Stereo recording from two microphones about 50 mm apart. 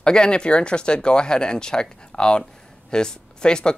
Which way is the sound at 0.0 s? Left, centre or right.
Centre.